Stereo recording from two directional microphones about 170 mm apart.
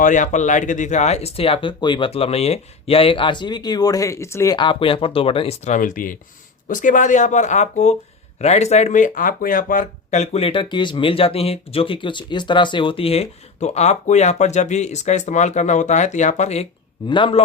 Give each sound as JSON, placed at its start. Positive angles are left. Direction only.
{"t": 0.0, "sound": "speech", "side_deg": 50}
{"t": 17.1, "sound": "speech", "side_deg": 30}